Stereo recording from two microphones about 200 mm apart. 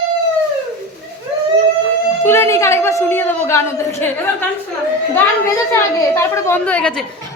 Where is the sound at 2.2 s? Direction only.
10° left (ahead or behind).